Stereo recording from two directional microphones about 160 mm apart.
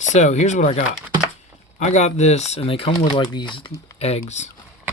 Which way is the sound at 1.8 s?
45° left (ahead or behind).